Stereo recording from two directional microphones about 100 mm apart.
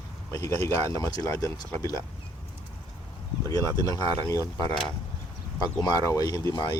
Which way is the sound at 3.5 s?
40° left (ahead or behind).